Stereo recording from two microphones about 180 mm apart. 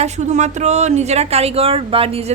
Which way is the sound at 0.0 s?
40° right (ahead or behind).